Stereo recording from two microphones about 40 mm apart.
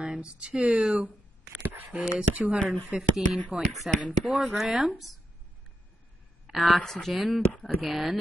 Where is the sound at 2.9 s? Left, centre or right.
Right.